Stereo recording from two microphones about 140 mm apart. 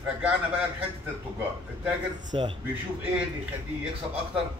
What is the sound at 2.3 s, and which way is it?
Speech, 35° right (ahead or behind).